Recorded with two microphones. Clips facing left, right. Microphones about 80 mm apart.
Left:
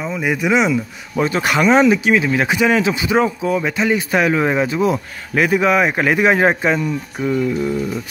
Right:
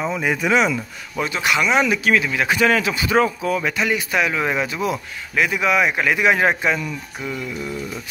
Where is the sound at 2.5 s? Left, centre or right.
Centre.